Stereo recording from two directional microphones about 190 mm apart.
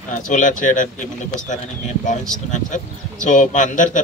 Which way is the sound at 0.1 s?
40° left (ahead or behind).